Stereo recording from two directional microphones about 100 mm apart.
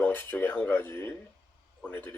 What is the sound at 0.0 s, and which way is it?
Speech, 20° left (ahead or behind).